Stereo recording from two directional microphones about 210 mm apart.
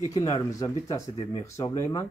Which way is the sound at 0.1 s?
15° left (ahead or behind).